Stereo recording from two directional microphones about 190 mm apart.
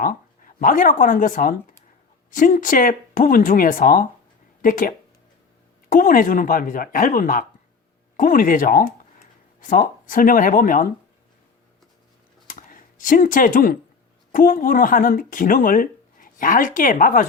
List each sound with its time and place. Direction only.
0.0 s speech: 45° left (ahead or behind)
12.5 s a sound: 45° left (ahead or behind)
14.3 s speech: 45° left (ahead or behind)